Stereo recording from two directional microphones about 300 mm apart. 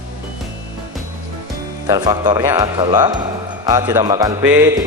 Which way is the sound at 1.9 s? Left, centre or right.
Centre.